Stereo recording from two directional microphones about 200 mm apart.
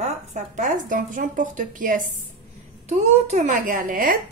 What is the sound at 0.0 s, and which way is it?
A woman's voice, 35° right (ahead or behind).